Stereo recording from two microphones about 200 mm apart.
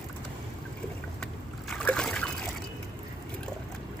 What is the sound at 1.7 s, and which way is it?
Trickle, 5° left (ahead or behind).